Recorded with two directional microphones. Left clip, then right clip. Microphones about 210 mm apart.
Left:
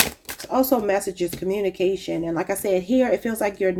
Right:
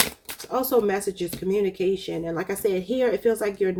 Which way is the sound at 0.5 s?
30° left (ahead or behind).